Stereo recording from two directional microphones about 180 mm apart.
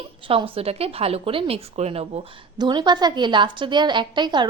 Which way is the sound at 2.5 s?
25° right (ahead or behind).